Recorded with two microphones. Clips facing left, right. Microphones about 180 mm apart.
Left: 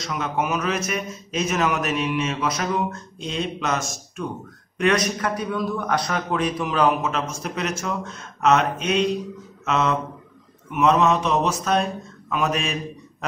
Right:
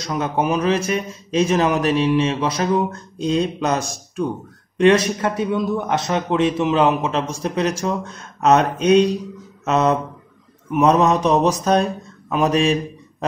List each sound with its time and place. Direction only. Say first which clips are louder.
0.1 s a man's voice: right 5 dB; 35° right (ahead or behind)